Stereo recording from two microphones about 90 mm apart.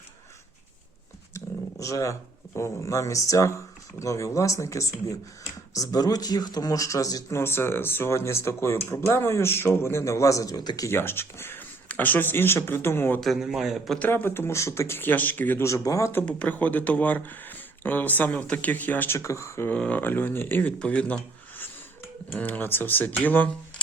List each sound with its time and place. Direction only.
1.8 s speech: 35° left (ahead or behind)
7.3 s speech: 25° left (ahead or behind); by 10.8 s 45° left (ahead or behind)
10.8 s speech: 25° left (ahead or behind)
13.1 s a man's voice: centre (ahead or behind)
14.0 s speech: 20° left (ahead or behind)
15.6 s speech: 35° left (ahead or behind)
16.2 s speech: 15° left (ahead or behind); by 19.7 s 30° left (ahead or behind)
19.7 s speech: 10° left (ahead or behind)
20.0 s speech: 20° left (ahead or behind)